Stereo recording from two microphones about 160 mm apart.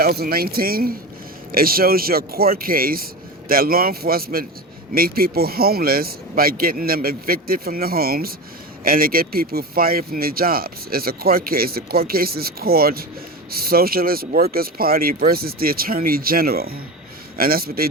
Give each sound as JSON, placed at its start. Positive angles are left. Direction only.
{"t": 0.0, "sound": "speech", "side_deg": -75}